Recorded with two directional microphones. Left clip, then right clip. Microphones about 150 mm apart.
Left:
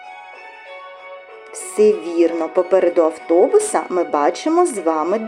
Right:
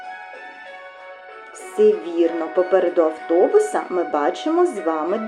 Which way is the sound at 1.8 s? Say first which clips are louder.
Left 2 dB; 35° left (ahead or behind).